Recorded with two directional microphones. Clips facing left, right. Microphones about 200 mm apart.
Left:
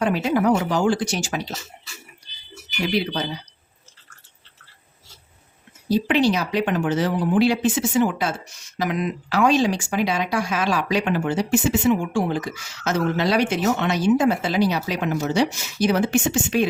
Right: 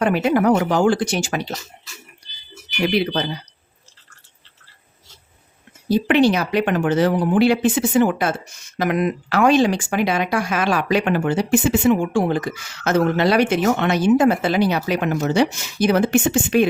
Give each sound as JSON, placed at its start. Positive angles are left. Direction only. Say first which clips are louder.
{"t": 0.0, "sound": "speech", "louder": "right 3 dB", "side_deg": -60}
{"t": 6.1, "sound": "speech", "louder": "right 5 dB", "side_deg": -60}